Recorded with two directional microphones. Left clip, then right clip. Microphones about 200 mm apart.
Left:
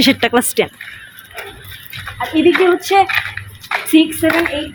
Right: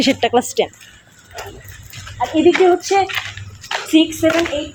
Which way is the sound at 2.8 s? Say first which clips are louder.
Left 4 dB; 50° left (ahead or behind).